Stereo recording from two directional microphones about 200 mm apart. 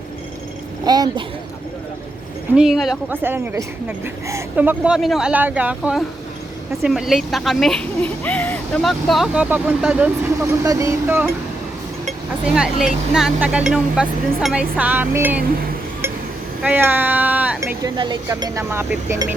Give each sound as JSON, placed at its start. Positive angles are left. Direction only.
{"t": 0.9, "sound": "speech", "side_deg": -20}
{"t": 2.6, "sound": "a woman's voice", "side_deg": 0}
{"t": 12.5, "sound": "speech", "side_deg": -5}
{"t": 16.6, "sound": "speech", "side_deg": -10}